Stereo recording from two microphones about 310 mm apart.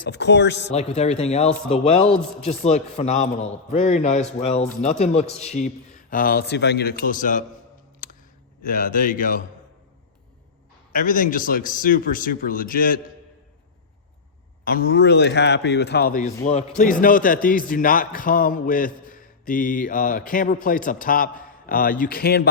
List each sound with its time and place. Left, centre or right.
0.0 s a man's voice: left
0.7 s a man's voice: left
8.6 s a man's voice: left
10.9 s a man's voice: left
14.6 s a man's voice: left